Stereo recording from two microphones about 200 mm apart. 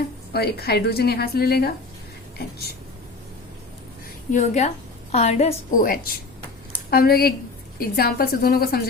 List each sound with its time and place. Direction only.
0.3 s a woman's voice: 50° left (ahead or behind)
4.3 s a woman's voice: 35° left (ahead or behind)